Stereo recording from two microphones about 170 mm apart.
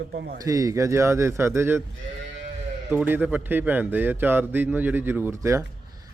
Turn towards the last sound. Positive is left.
turn(degrees=-15)  # may be behind; listen again after turning